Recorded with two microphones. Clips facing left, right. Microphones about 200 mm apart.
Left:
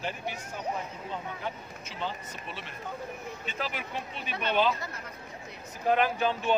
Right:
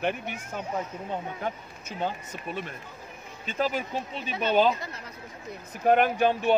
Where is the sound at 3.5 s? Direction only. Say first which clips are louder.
Right 9 dB; 35° right (ahead or behind).